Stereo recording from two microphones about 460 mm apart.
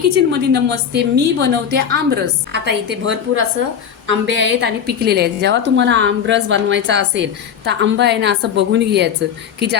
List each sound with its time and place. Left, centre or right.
0.3 s a woman's voice: right